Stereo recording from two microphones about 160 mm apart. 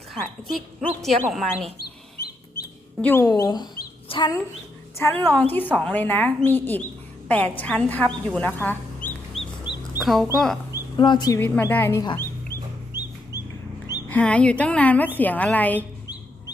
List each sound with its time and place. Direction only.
0.1 s speech: centre (ahead or behind)
1.8 s chicken: 75° left (ahead or behind)
3.0 s speech: 15° left (ahead or behind); by 4.4 s 30° left (ahead or behind)
4.9 s a woman's voice: 15° left (ahead or behind)
9.9 s speech: centre (ahead or behind)
10.9 s speech: 30° left (ahead or behind)
11.3 s a woman's voice: 10° left (ahead or behind)
13.3 s chicken: 20° left (ahead or behind)
14.1 s a woman's voice: 5° left (ahead or behind)